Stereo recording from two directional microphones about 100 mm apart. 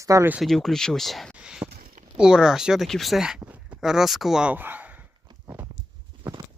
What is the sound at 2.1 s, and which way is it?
Speech, 5° right (ahead or behind).